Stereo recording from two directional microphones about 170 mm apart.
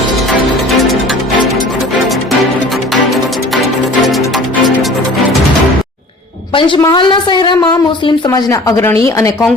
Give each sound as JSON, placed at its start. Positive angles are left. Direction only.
{"t": 6.5, "sound": "a woman's voice", "side_deg": 30}